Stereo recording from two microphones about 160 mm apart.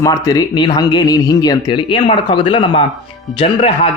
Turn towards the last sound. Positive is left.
turn(degrees=35)  # may be behind; listen again after turning